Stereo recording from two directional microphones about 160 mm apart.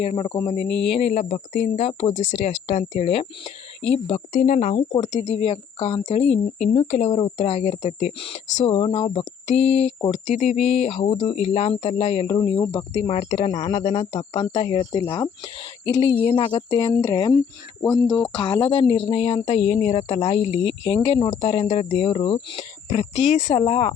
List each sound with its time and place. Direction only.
0.0 s speech: 35° left (ahead or behind)
4.3 s speech: 50° left (ahead or behind)
7.1 s speech: 30° left (ahead or behind)
7.3 s speech: 45° left (ahead or behind)
22.9 s speech: 45° left (ahead or behind)